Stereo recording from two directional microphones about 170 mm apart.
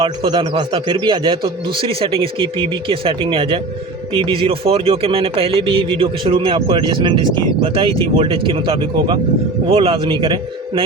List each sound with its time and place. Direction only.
0.0 s speech: 30° right (ahead or behind)